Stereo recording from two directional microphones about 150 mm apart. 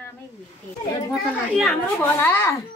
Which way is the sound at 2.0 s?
15° left (ahead or behind).